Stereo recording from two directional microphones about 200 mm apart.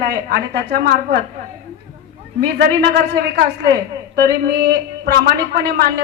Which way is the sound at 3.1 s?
60° right (ahead or behind).